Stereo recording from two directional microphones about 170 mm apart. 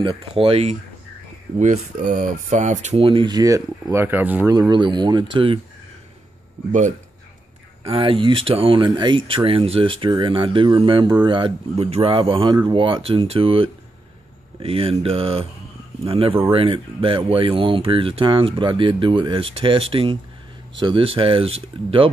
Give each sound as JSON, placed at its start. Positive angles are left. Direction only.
{"t": 0.0, "sound": "speech", "side_deg": -30}
{"t": 1.6, "sound": "speech", "side_deg": -50}
{"t": 4.6, "sound": "speech", "side_deg": -25}
{"t": 7.8, "sound": "speech", "side_deg": -30}